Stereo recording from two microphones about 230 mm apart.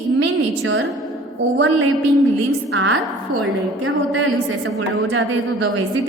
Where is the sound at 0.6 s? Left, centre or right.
Right.